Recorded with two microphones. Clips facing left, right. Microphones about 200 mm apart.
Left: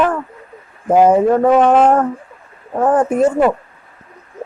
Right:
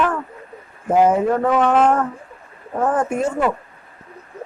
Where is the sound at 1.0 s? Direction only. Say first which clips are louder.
Left 5 dB; 35° left (ahead or behind).